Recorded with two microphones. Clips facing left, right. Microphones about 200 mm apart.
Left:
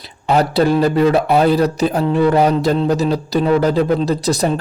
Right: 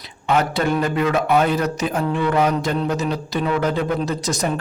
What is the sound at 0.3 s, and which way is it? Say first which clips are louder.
Speech: left 5 dB; 35° left (ahead or behind).